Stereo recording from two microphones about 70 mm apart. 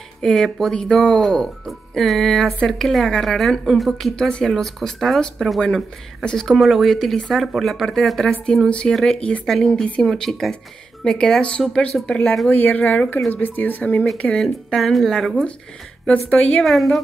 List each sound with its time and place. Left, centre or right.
0.2 s speech: centre
8.6 s speech: centre
12.4 s a woman's voice: left; by 15.4 s centre
16.1 s a woman's voice: left
16.6 s speech: centre